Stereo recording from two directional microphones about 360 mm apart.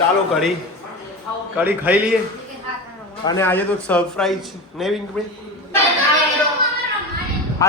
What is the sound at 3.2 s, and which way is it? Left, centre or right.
A man's voice, centre.